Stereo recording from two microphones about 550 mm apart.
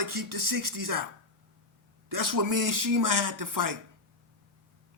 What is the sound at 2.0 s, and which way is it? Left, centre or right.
Speech, right.